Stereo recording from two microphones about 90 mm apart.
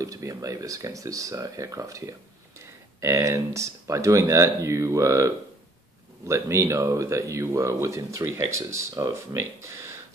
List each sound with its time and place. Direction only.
0.0 s speech: 40° right (ahead or behind)